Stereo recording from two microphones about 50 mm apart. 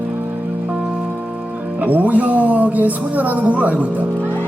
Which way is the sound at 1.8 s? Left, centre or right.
Right.